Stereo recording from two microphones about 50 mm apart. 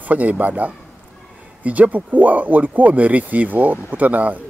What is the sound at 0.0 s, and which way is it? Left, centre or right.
Speech, right.